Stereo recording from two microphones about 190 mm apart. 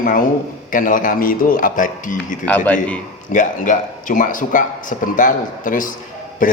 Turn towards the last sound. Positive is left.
turn(degrees=45)  # may be behind; listen again after turning